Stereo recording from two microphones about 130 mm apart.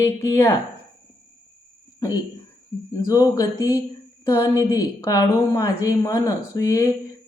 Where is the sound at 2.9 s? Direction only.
25° left (ahead or behind).